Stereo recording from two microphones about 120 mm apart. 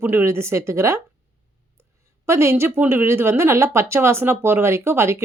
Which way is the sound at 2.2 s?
25° right (ahead or behind).